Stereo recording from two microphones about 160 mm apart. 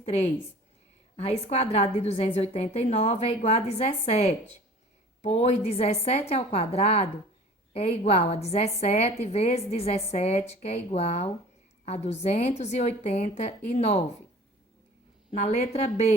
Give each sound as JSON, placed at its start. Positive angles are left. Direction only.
{"t": 0.0, "sound": "a woman's voice", "side_deg": 40}
{"t": 15.3, "sound": "a woman's voice", "side_deg": 45}